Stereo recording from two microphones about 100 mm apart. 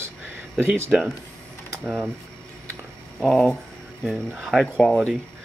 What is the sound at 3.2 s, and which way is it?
Speech, 10° left (ahead or behind).